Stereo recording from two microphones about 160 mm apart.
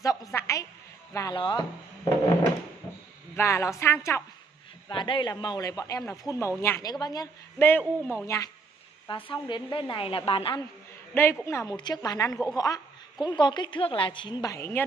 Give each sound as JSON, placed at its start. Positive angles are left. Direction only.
{"t": 0.0, "sound": "a sound", "side_deg": 20}
{"t": 1.1, "sound": "a woman's voice", "side_deg": 25}
{"t": 3.3, "sound": "a woman's voice", "side_deg": 15}
{"t": 4.8, "sound": "a woman's voice", "side_deg": 30}
{"t": 9.0, "sound": "a woman's voice", "side_deg": 30}
{"t": 11.1, "sound": "a woman's voice", "side_deg": 15}
{"t": 14.4, "sound": "a woman's voice", "side_deg": 20}